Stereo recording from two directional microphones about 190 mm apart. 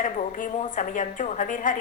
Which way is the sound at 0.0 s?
40° left (ahead or behind).